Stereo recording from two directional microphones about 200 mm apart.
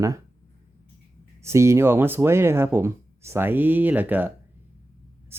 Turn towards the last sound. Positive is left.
turn(degrees=-10)  # may be behind; listen again after turning